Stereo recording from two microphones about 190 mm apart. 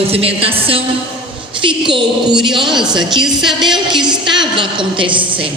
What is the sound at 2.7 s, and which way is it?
A woman's voice, centre (ahead or behind).